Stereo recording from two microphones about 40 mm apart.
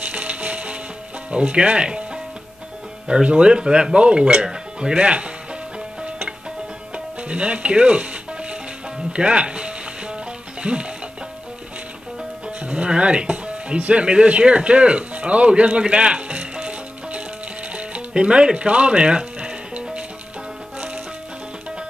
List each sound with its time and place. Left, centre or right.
0.0 s music: right
1.3 s speech: right
3.1 s speech: right
4.5 s music: centre
4.9 s music: right
12.5 s speech: right
17.7 s music: right